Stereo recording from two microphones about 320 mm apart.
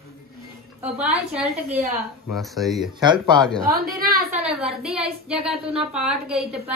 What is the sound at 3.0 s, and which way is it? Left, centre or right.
Speech, centre.